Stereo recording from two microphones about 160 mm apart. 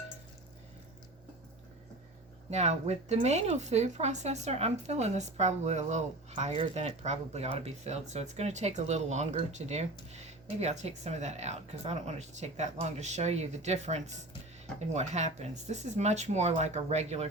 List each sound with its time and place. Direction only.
2.5 s speech: 45° right (ahead or behind)